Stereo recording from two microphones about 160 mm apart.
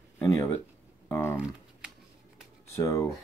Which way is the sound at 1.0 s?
15° left (ahead or behind).